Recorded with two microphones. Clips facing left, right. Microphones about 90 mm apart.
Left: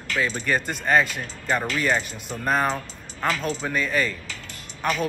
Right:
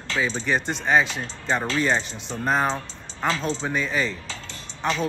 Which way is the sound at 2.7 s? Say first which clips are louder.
Even; 25° right (ahead or behind).